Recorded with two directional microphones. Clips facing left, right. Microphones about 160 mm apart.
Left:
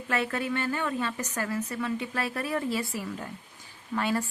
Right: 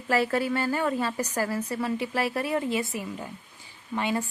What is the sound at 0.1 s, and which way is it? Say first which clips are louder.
A woman's voice: right 5 dB; 30° right (ahead or behind).